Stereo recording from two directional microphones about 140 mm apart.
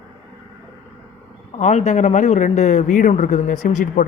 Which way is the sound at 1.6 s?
60° left (ahead or behind).